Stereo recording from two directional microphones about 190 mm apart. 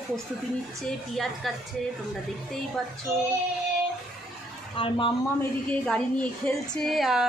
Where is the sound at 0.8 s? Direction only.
Centre (ahead or behind).